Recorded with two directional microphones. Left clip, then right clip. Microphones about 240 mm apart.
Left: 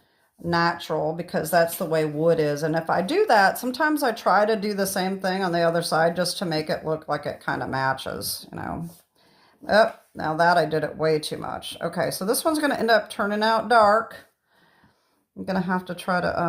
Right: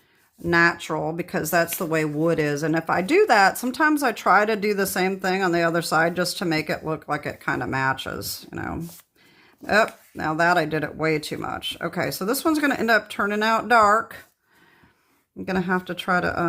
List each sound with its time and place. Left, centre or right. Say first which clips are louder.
0.4 s speech: right 4 dB; right
8.2 s speech: left 1 dB; right
8.5 s speech: right 1 dB; right
15.4 s speech: right 2 dB; centre